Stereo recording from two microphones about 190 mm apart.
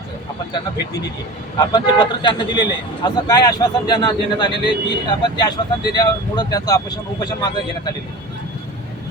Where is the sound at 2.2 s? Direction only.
25° left (ahead or behind).